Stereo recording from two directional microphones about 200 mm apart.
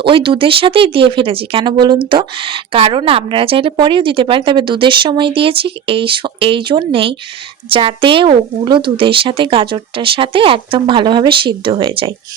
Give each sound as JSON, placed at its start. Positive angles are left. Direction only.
{"t": 0.0, "sound": "speech", "side_deg": -25}